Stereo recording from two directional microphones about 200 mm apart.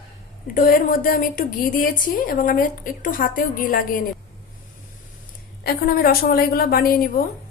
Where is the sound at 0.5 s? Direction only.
45° left (ahead or behind).